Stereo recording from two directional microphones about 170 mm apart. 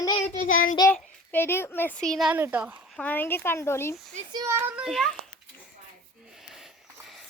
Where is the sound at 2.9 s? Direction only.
10° left (ahead or behind).